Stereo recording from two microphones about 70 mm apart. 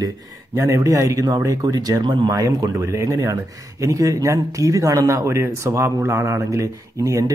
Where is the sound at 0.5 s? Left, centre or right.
Right.